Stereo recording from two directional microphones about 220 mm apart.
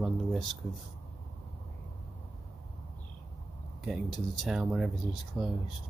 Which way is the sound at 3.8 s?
Centre (ahead or behind).